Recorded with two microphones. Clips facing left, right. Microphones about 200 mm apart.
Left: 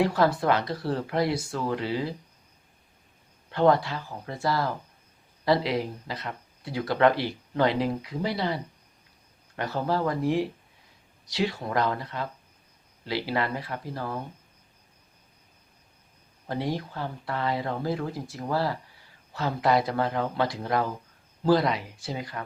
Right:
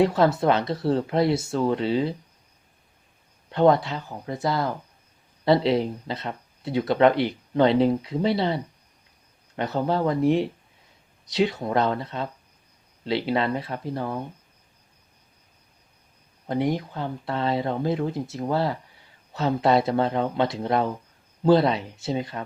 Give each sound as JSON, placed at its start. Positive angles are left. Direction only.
{"t": 0.0, "sound": "speech", "side_deg": -25}
{"t": 3.5, "sound": "speech", "side_deg": -20}
{"t": 16.5, "sound": "speech", "side_deg": -20}